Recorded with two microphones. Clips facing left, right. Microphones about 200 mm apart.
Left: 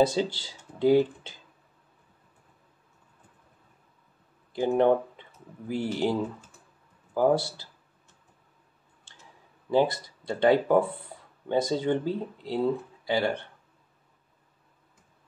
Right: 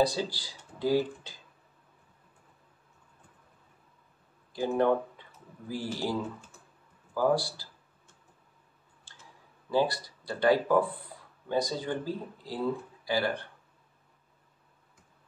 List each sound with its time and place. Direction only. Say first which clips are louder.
0.0 s speech: left 4 dB; 25° left (ahead or behind)
4.5 s speech: left 4 dB; 20° left (ahead or behind)
7.2 s speech: left 3 dB; 20° left (ahead or behind)
9.1 s clicking: left 1 dB; 20° left (ahead or behind)
9.7 s speech: left 4 dB; 20° left (ahead or behind)